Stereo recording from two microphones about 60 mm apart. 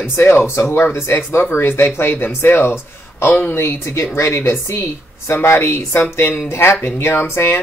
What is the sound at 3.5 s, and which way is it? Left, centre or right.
Speech, left.